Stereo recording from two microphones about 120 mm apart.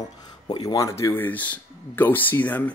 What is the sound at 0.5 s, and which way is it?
Speech, 35° left (ahead or behind).